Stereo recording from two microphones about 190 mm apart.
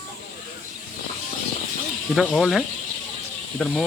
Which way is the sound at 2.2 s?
Centre (ahead or behind).